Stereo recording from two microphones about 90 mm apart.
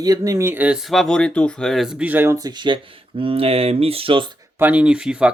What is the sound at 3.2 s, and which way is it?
Speech, 90° right.